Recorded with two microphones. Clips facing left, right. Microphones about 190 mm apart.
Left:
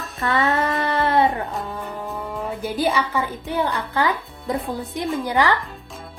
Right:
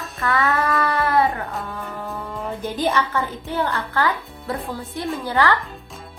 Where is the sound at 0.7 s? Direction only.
25° left (ahead or behind).